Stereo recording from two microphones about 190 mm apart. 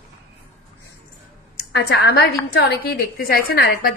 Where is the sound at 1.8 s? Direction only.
60° left (ahead or behind).